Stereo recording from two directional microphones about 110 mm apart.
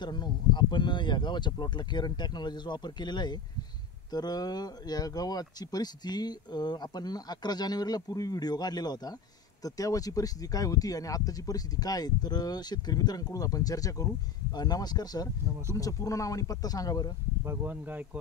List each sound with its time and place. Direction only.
0.0 s speech: 40° left (ahead or behind)
17.5 s speech: 15° right (ahead or behind)